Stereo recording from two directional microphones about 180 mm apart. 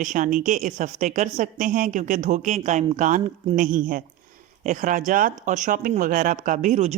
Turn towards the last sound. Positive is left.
turn(degrees=-40)  # may be behind; listen again after turning